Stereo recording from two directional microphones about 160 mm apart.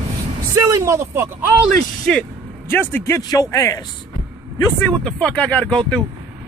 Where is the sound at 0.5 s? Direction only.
20° right (ahead or behind).